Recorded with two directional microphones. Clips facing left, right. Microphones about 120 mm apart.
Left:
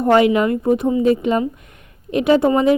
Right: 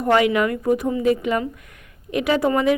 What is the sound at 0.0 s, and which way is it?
Speech, 25° left (ahead or behind).